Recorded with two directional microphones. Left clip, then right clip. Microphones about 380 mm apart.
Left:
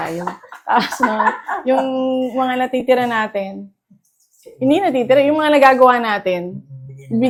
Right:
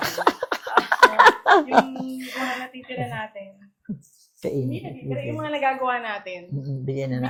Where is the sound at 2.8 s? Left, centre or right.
Left.